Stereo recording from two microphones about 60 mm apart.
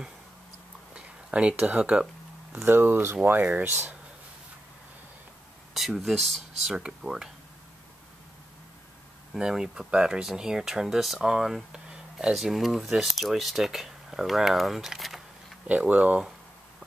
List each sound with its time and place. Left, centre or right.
0.9 s a sound: right
1.6 s speech: right
2.5 s speech: right
5.8 s speech: centre
9.4 s speech: centre
12.4 s speech: centre
15.6 s speech: right